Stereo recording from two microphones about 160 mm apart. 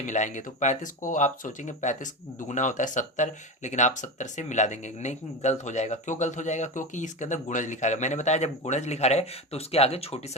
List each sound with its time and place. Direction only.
0.0 s speech: 50° left (ahead or behind)